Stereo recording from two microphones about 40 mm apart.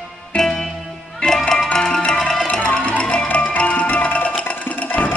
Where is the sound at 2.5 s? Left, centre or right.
Left.